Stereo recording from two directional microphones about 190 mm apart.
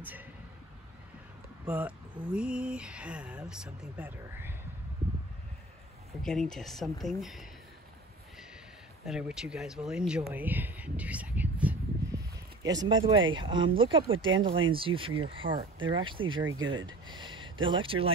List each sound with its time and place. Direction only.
0.0 s speech: 10° right (ahead or behind)
1.7 s speech: 10° right (ahead or behind)
6.2 s speech: 5° left (ahead or behind)
9.0 s speech: centre (ahead or behind)
12.6 s speech: 25° right (ahead or behind)
16.4 s speech: 90° right
16.7 s speech: 25° right (ahead or behind)